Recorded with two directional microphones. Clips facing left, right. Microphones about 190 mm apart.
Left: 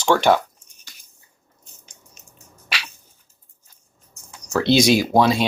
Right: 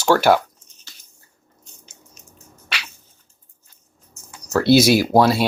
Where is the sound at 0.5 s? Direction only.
10° left (ahead or behind).